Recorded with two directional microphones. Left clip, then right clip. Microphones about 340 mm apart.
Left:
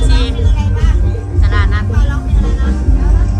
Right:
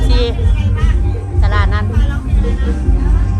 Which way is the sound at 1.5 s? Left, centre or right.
Centre.